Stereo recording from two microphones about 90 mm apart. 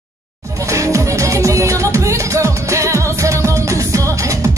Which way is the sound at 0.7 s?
35° right (ahead or behind).